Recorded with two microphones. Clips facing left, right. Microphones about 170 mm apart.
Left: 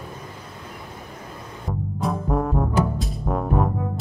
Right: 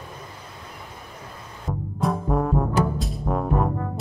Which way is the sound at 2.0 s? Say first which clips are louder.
Right 1 dB; centre (ahead or behind).